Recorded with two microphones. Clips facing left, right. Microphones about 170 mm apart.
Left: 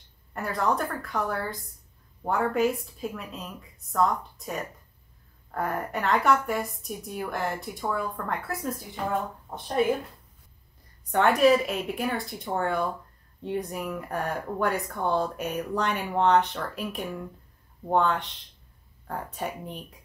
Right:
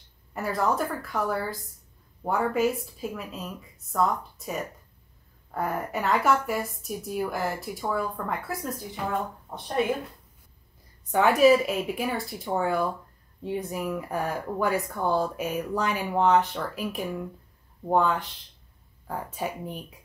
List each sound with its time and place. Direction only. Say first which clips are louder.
0.3 s speech: right 1 dB; centre (ahead or behind)
11.1 s speech: right 1 dB; centre (ahead or behind)